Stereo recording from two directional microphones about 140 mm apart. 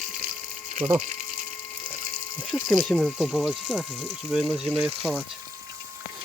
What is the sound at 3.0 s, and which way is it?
Speech, centre (ahead or behind).